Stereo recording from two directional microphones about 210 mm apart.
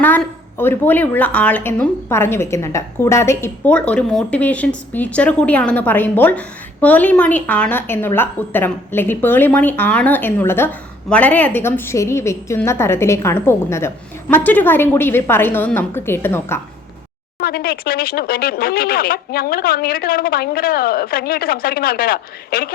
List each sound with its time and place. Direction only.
0.0 s a woman's voice: 10° left (ahead or behind)
17.4 s speech: 45° left (ahead or behind)